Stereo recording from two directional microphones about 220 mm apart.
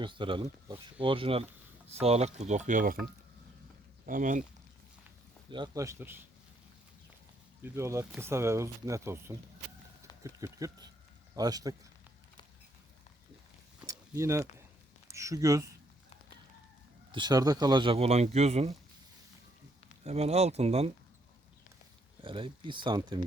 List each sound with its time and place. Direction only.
0.0 s speech: 20° right (ahead or behind); by 3.0 s 40° right (ahead or behind)
4.0 s speech: 35° right (ahead or behind)
5.5 s speech: 20° right (ahead or behind)
7.6 s speech: 10° right (ahead or behind)
13.8 s a sound: 15° right (ahead or behind)
15.0 s speech: 15° right (ahead or behind)
17.1 s speech: 20° right (ahead or behind)
20.1 s speech: 30° right (ahead or behind)
22.2 s speech: 25° right (ahead or behind)